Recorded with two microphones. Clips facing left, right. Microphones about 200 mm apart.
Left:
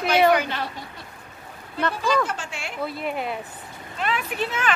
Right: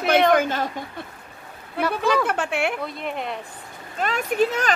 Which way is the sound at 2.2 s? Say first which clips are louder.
Right 9 dB; 60° right (ahead or behind).